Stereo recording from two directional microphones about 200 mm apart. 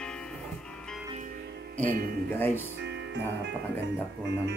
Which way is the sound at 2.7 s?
60° right (ahead or behind).